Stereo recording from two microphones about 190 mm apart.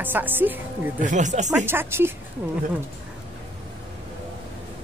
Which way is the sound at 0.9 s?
40° right (ahead or behind).